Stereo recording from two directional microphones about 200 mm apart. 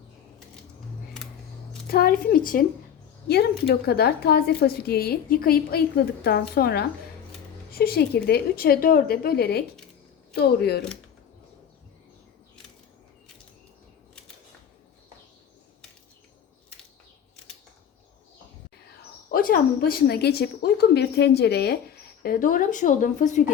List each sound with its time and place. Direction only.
1.9 s a woman's voice: 50° left (ahead or behind)
3.8 s a woman's voice: 50° left (ahead or behind)
19.3 s a woman's voice: 45° left (ahead or behind)